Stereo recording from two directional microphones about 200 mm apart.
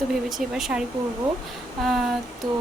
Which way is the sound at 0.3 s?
Centre (ahead or behind).